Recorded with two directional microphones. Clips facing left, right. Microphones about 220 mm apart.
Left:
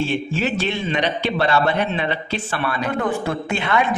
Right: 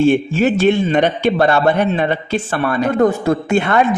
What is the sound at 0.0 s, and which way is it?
A man's voice, 50° right (ahead or behind).